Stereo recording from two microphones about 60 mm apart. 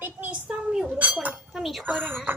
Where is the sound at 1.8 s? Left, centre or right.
Right.